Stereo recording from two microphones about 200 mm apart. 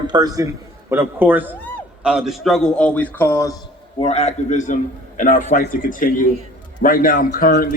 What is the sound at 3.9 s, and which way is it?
A man's voice, 30° left (ahead or behind).